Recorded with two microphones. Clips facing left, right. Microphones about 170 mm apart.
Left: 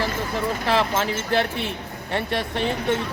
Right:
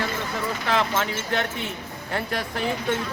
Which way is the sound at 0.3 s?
30° left (ahead or behind).